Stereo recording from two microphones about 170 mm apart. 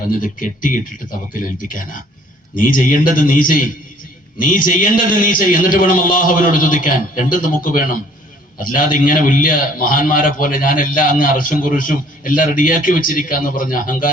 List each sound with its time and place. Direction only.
0.2 s a man's voice: 50° left (ahead or behind)